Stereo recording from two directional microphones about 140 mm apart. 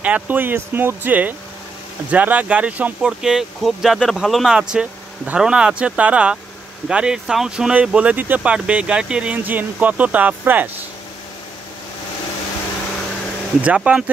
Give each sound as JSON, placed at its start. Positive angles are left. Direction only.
{"t": 0.0, "sound": "speech", "side_deg": -10}
{"t": 13.6, "sound": "speech", "side_deg": -10}